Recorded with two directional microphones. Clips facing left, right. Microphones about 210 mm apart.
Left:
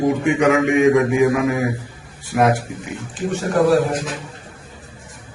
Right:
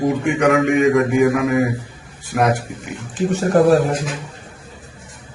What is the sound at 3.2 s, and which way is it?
Speech, 40° right (ahead or behind).